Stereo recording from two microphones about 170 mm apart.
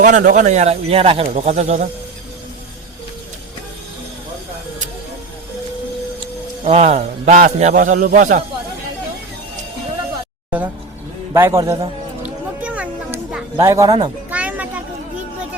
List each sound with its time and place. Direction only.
0.0 s speech: 45° right (ahead or behind)
6.7 s a man's voice: 40° right (ahead or behind)
11.3 s speech: 15° right (ahead or behind)
12.2 s a sound: 10° right (ahead or behind); by 14.1 s 25° right (ahead or behind)
14.3 s children playing: 10° right (ahead or behind)